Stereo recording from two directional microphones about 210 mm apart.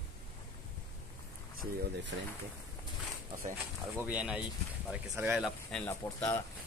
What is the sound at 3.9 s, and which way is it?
Speech, 5° right (ahead or behind).